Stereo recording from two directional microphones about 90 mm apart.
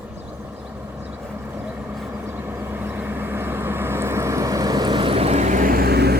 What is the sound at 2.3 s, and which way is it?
Vehicle, 20° right (ahead or behind).